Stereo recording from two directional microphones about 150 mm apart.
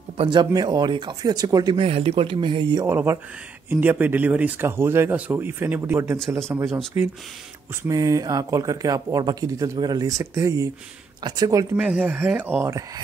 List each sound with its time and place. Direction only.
0.2 s speech: 30° right (ahead or behind)
1.8 s speech: 40° right (ahead or behind)
2.8 s speech: 15° right (ahead or behind)
6.1 s speech: 5° left (ahead or behind)
7.0 s speech: 15° right (ahead or behind)
11.7 s speech: 10° right (ahead or behind)